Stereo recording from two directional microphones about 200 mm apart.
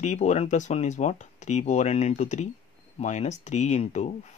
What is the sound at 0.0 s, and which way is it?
Speech, 35° left (ahead or behind).